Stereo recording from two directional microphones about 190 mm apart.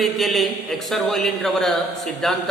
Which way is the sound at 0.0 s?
Centre (ahead or behind).